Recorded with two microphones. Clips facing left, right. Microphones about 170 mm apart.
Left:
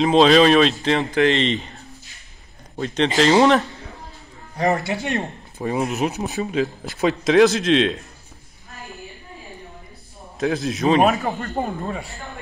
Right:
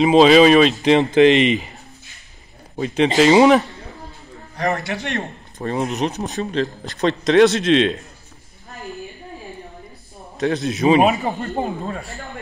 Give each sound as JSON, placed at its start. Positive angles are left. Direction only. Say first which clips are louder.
{"t": 0.0, "sound": "speech", "louder": "right 3 dB", "side_deg": -5}
{"t": 0.8, "sound": "speech", "louder": "right 6 dB", "side_deg": -20}
{"t": 2.8, "sound": "speech", "louder": "right 3 dB", "side_deg": -5}
{"t": 4.9, "sound": "speech", "louder": "left 1 dB", "side_deg": 5}
{"t": 10.4, "sound": "speech", "louder": "right 2 dB", "side_deg": 0}
{"t": 11.1, "sound": "speech", "louder": "right 1 dB", "side_deg": -20}
{"t": 11.5, "sound": "speech", "louder": "right 1 dB", "side_deg": 0}